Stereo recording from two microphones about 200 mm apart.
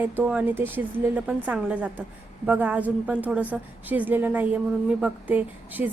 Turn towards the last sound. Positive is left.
turn(degrees=-10)  # may be behind; listen again after turning